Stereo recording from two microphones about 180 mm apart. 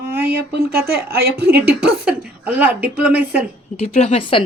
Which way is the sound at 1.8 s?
5° right (ahead or behind).